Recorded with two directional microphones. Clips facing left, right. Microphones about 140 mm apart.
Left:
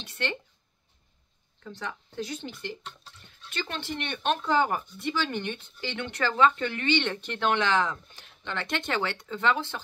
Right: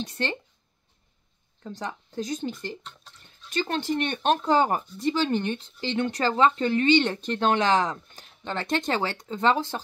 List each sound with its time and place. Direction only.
0.0 s speech: 35° right (ahead or behind)
1.6 s speech: 40° right (ahead or behind)